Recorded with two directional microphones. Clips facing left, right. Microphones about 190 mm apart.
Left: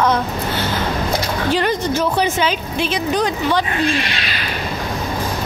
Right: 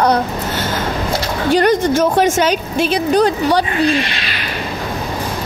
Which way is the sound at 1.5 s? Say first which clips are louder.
Right 8 dB; 45° right (ahead or behind).